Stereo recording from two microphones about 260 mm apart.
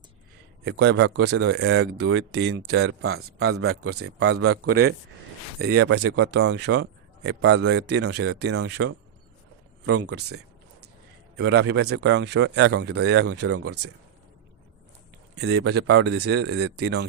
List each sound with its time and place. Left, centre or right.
0.6 s a man's voice: right
3.2 s a man's voice: right
5.8 s a man's voice: right
11.3 s a man's voice: right
13.4 s a man's voice: right
15.4 s a man's voice: right